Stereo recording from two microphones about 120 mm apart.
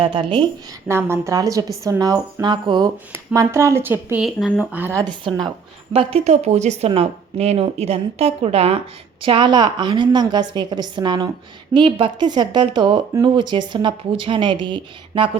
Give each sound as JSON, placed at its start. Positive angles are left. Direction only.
{"t": 0.0, "sound": "a woman's voice", "side_deg": -40}
{"t": 0.9, "sound": "a woman's voice", "side_deg": -20}
{"t": 3.1, "sound": "a woman's voice", "side_deg": -25}
{"t": 4.2, "sound": "speech", "side_deg": -5}
{"t": 4.7, "sound": "speech", "side_deg": -15}
{"t": 5.9, "sound": "a woman's voice", "side_deg": -55}
{"t": 9.2, "sound": "a woman's voice", "side_deg": -45}